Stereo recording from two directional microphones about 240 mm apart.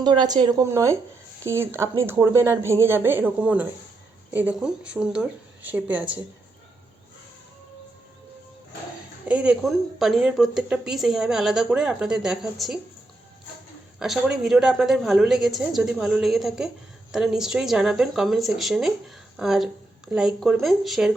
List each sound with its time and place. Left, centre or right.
0.0 s a woman's voice: centre
9.2 s a woman's voice: centre
14.0 s a woman's voice: centre